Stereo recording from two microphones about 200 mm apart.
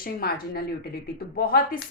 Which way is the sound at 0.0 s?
50° left (ahead or behind).